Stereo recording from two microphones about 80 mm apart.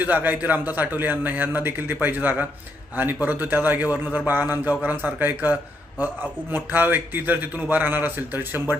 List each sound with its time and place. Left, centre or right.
0.0 s a man's voice: right